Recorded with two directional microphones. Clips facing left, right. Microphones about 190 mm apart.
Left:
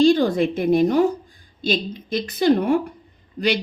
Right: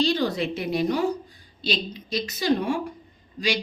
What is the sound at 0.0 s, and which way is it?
A woman's voice, 50° left (ahead or behind).